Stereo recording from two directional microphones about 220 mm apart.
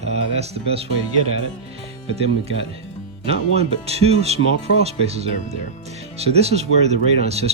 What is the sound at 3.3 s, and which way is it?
Speech, 30° right (ahead or behind).